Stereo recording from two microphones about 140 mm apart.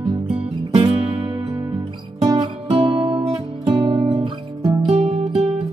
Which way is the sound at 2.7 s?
45° right (ahead or behind).